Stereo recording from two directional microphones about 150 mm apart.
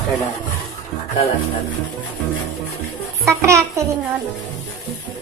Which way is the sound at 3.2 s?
20° right (ahead or behind).